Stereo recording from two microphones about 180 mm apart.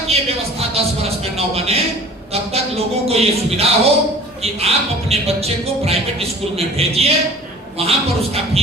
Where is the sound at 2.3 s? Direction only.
35° right (ahead or behind).